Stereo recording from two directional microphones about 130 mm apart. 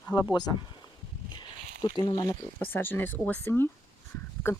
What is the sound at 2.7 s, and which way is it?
Speech, 15° left (ahead or behind).